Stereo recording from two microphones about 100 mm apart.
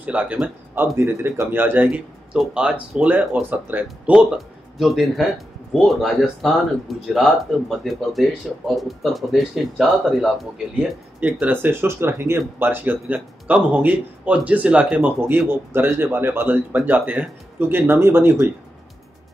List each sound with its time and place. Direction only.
0.0 s speech: 15° right (ahead or behind)
0.9 s speech: 25° right (ahead or behind)
4.1 s speech: 5° right (ahead or behind)
11.1 s speech: 15° right (ahead or behind)